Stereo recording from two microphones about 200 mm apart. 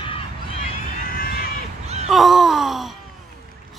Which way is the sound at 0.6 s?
45° left (ahead or behind).